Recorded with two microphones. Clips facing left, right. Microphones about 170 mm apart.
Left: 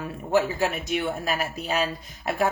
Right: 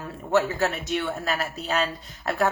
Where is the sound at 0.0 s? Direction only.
15° left (ahead or behind).